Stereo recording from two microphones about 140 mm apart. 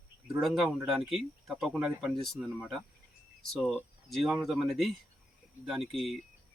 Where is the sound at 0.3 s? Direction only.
Centre (ahead or behind).